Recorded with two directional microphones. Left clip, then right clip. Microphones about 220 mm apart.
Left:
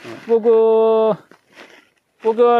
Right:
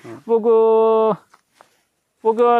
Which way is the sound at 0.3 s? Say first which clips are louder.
Left 1 dB; 25° right (ahead or behind).